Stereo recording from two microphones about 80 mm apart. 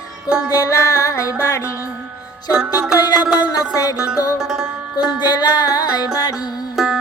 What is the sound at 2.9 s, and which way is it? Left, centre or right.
Music, left.